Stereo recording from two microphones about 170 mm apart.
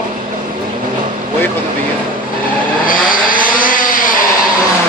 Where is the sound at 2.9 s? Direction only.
55° left (ahead or behind).